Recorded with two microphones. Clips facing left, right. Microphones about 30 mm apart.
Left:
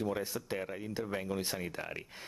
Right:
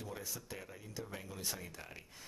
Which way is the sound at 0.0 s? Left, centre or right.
Left.